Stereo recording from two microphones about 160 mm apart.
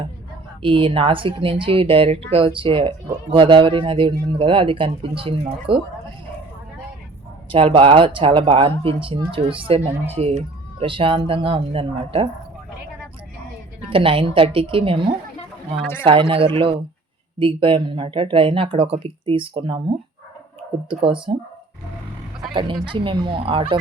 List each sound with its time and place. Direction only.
0.6 s speech: 35° right (ahead or behind)
7.5 s speech: 35° right (ahead or behind)
13.9 s speech: 35° right (ahead or behind)
17.4 s speech: 35° right (ahead or behind)
20.9 s speech: 30° right (ahead or behind)
22.5 s a woman's voice: 30° right (ahead or behind)